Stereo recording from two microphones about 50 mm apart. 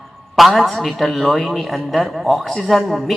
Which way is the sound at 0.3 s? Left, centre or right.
Centre.